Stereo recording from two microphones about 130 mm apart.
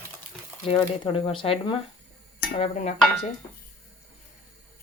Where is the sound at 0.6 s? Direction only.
45° left (ahead or behind).